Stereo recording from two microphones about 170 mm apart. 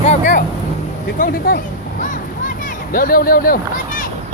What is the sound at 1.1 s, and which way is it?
Speech, 60° left (ahead or behind).